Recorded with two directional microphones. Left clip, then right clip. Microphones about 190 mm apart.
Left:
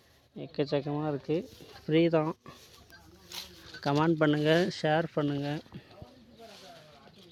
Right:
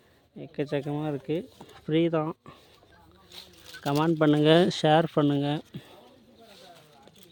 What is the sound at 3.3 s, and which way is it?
Speech, 65° left (ahead or behind).